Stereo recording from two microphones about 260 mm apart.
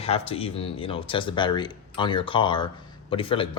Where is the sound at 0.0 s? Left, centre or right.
Left.